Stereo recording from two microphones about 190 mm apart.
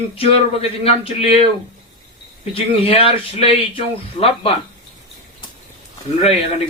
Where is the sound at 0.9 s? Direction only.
30° left (ahead or behind).